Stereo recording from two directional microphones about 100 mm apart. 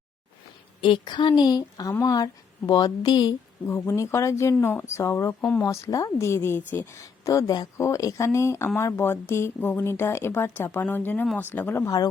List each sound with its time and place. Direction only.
0.8 s a woman's voice: 50° left (ahead or behind)
3.7 s speech: 30° left (ahead or behind)
5.4 s speech: 15° left (ahead or behind)
5.6 s speech: 35° left (ahead or behind)
7.0 s speech: 35° left (ahead or behind)